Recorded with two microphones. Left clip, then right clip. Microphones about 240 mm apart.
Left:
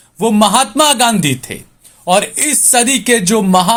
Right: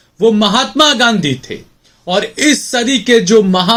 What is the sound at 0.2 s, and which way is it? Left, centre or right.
Speech, left.